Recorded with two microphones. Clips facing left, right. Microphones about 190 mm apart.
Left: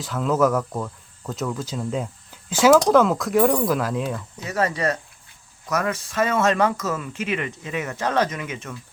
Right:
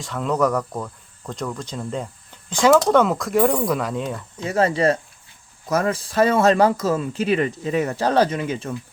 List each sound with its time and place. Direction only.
0.0 s speech: centre (ahead or behind)
4.4 s speech: 30° right (ahead or behind)